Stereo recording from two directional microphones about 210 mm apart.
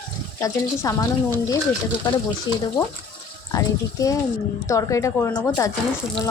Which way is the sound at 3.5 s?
15° left (ahead or behind).